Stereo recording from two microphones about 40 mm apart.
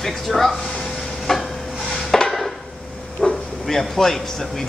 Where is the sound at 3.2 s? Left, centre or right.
Left.